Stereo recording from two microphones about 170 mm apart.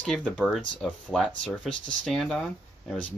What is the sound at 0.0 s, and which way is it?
Speech, centre (ahead or behind).